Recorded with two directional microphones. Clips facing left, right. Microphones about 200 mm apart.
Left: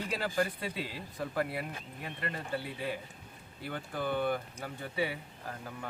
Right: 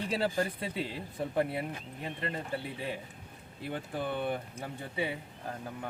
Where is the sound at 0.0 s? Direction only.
25° right (ahead or behind).